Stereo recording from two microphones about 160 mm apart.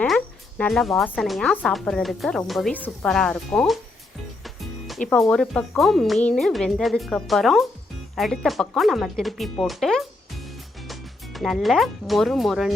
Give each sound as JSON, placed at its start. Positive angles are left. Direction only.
{"t": 0.6, "sound": "speech", "side_deg": 0}
{"t": 5.0, "sound": "speech", "side_deg": 5}
{"t": 11.3, "sound": "speech", "side_deg": 0}